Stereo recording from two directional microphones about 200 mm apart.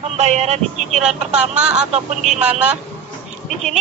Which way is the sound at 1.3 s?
5° right (ahead or behind).